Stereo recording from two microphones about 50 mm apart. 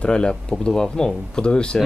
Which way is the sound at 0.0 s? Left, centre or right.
Centre.